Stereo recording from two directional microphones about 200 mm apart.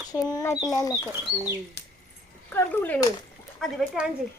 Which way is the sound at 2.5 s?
10° left (ahead or behind).